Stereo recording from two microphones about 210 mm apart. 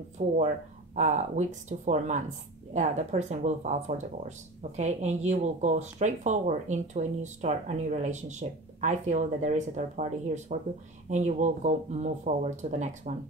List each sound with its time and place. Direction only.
0.2 s speech: 30° right (ahead or behind)